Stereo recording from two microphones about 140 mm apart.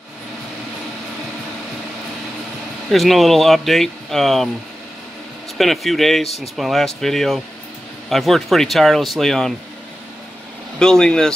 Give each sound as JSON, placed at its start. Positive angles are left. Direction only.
{"t": 2.9, "sound": "speech", "side_deg": 0}
{"t": 5.6, "sound": "speech", "side_deg": 0}
{"t": 6.2, "sound": "speech", "side_deg": 50}
{"t": 6.5, "sound": "speech", "side_deg": 0}
{"t": 10.8, "sound": "speech", "side_deg": 5}